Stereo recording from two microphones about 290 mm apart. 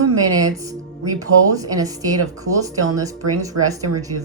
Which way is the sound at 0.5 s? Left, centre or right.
Centre.